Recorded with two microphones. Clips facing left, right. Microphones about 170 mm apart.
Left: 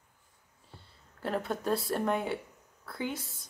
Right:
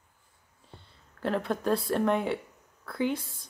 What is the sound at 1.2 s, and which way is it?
Speech, 5° left (ahead or behind).